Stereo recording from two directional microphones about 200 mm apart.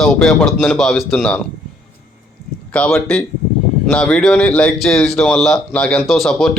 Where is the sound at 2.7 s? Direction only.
5° left (ahead or behind).